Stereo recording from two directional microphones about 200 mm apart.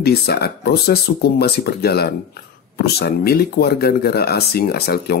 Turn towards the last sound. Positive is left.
turn(degrees=50)  # may be behind; listen again after turning